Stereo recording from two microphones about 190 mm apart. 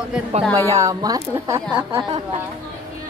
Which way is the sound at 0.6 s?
15° right (ahead or behind).